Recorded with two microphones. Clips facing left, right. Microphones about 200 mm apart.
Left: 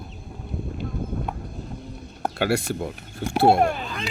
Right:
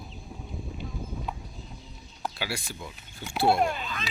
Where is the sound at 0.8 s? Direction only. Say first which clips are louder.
Left 9 dB; 60° left (ahead or behind).